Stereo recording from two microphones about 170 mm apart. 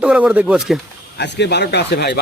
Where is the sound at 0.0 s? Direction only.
5° right (ahead or behind).